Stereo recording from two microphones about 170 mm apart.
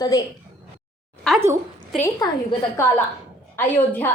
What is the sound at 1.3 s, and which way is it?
Speech, 5° left (ahead or behind).